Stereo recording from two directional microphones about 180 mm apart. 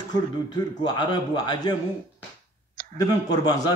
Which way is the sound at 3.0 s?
20° left (ahead or behind).